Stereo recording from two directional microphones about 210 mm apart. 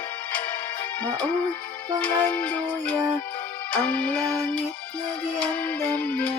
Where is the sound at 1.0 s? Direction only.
10° left (ahead or behind).